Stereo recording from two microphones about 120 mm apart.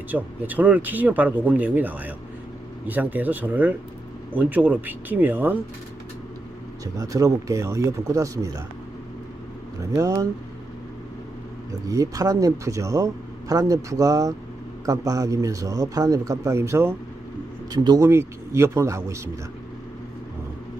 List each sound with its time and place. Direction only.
0.1 s speech: 15° right (ahead or behind)
6.8 s speech: 30° right (ahead or behind)
9.8 s speech: 25° right (ahead or behind)
11.7 s speech: 30° right (ahead or behind)
17.7 s speech: 30° right (ahead or behind)